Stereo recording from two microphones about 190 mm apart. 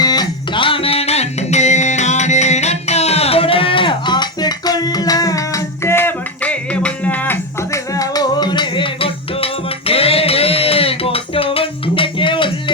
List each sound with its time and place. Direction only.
0.0 s music: 20° left (ahead or behind)